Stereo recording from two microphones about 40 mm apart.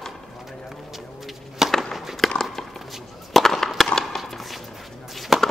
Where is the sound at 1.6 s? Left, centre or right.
Centre.